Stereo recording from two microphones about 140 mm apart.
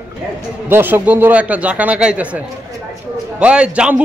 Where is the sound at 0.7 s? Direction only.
15° right (ahead or behind).